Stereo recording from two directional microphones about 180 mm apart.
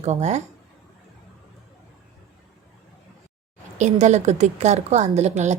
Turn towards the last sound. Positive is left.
turn(degrees=-40)  # may be behind; listen again after turning